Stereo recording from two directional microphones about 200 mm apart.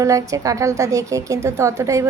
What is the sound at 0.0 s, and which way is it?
A woman's voice, 15° right (ahead or behind).